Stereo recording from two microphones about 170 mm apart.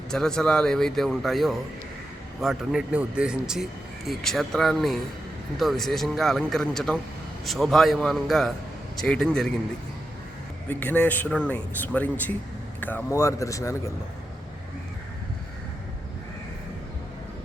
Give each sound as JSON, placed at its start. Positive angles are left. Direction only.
{"t": 0.1, "sound": "a man's voice", "side_deg": 5}
{"t": 10.7, "sound": "speech", "side_deg": 10}